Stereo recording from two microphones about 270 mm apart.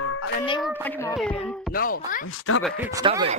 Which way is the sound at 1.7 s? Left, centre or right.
Left.